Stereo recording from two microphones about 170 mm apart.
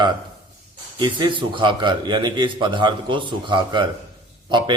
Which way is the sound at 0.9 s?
30° right (ahead or behind).